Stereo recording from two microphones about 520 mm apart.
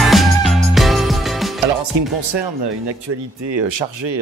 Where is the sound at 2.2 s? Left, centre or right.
Right.